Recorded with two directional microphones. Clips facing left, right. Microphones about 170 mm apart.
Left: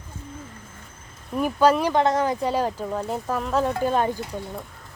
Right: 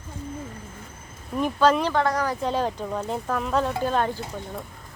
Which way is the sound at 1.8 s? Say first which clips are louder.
Left 3 dB; 20° left (ahead or behind).